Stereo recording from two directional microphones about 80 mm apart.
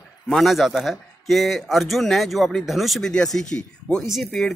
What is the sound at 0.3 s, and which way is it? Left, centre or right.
Speech, centre.